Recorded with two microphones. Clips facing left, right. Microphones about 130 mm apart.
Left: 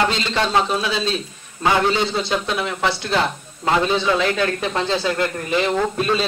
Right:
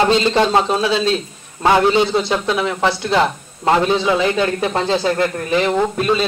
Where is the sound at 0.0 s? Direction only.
35° right (ahead or behind).